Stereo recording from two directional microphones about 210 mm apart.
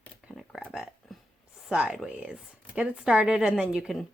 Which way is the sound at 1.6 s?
5° right (ahead or behind).